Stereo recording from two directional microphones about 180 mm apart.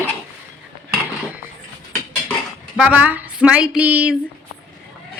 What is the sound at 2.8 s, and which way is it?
Speech, 10° right (ahead or behind).